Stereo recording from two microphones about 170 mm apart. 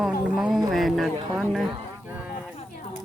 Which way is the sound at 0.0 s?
Centre (ahead or behind).